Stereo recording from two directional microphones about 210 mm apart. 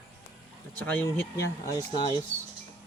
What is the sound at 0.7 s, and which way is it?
Speech, 10° left (ahead or behind).